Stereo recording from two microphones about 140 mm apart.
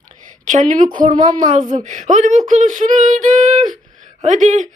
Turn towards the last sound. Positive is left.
turn(degrees=-60)  # may be behind; listen again after turning